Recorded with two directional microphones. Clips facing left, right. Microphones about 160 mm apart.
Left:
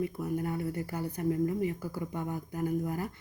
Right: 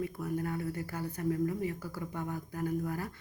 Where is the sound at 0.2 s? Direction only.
20° left (ahead or behind).